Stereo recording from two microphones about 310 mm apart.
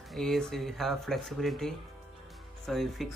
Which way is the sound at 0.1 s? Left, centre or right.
Centre.